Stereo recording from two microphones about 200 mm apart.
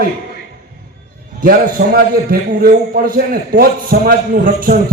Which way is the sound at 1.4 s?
45° right (ahead or behind).